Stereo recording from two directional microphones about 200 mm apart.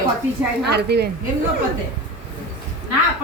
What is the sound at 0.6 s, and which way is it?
Speech, 55° right (ahead or behind).